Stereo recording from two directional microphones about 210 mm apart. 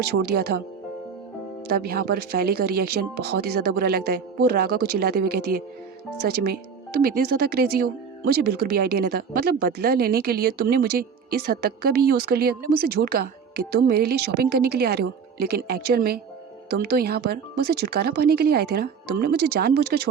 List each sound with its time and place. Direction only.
0.3 s speech: 50° right (ahead or behind)
1.6 s speech: 45° right (ahead or behind)